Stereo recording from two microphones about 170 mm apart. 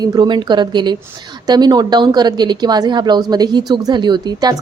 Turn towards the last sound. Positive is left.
turn(degrees=-25)  # may be behind; listen again after turning